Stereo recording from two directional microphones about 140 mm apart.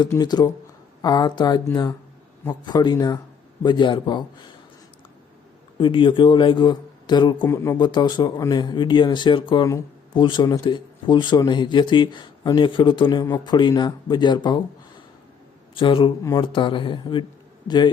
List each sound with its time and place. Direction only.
0.1 s speech: 30° left (ahead or behind)
5.7 s speech: 35° left (ahead or behind)
15.7 s a man's voice: 40° left (ahead or behind)